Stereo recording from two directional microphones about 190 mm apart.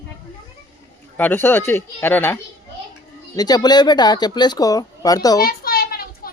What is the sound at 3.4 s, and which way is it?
Speech, 20° left (ahead or behind).